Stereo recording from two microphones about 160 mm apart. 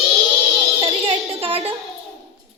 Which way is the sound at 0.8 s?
35° right (ahead or behind).